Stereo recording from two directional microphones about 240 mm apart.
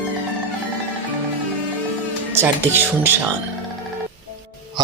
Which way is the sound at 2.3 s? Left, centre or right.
Centre.